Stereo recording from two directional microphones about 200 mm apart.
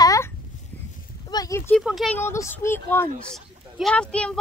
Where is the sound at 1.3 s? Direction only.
15° left (ahead or behind).